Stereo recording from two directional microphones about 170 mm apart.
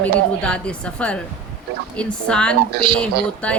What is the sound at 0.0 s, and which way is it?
A woman's voice, 5° left (ahead or behind).